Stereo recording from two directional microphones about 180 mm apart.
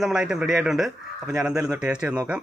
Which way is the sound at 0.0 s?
5° right (ahead or behind).